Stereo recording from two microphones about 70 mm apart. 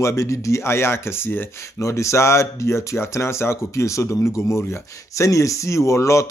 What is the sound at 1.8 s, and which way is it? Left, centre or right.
Speech, left.